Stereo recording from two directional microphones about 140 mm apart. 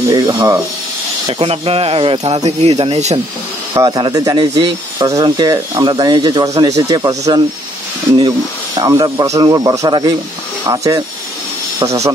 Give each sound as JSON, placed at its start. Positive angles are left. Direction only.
{"t": 0.1, "sound": "speech", "side_deg": -30}
{"t": 1.2, "sound": "speech", "side_deg": -40}
{"t": 3.7, "sound": "speech", "side_deg": -30}